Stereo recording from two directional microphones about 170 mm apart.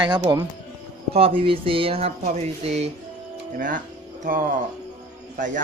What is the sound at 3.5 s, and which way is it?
Speech, 50° right (ahead or behind).